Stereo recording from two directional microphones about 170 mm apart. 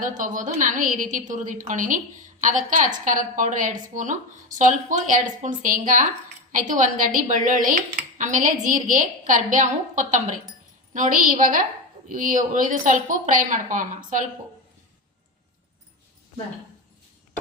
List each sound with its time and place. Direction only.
0.0 s speech: 50° right (ahead or behind)